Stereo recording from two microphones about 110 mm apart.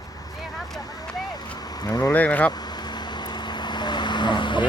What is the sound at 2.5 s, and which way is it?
Vehicle, 40° left (ahead or behind).